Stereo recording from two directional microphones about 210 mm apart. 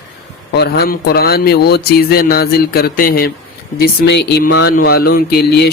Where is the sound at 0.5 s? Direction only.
50° left (ahead or behind).